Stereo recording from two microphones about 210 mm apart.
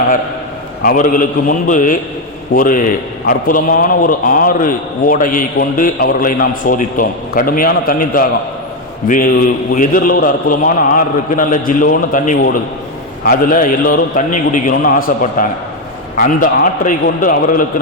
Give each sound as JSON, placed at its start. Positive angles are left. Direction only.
{"t": 0.8, "sound": "a man's voice", "side_deg": 40}